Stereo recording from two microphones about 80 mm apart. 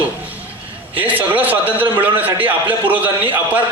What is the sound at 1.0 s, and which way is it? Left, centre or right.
A man's voice, right.